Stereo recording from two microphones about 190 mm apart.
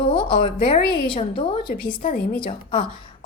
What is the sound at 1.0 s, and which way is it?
A woman's voice, 25° left (ahead or behind).